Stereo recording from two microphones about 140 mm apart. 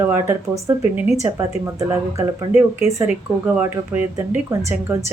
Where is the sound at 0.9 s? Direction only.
5° right (ahead or behind).